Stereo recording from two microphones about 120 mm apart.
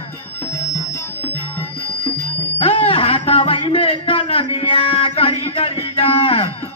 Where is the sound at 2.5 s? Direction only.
50° left (ahead or behind).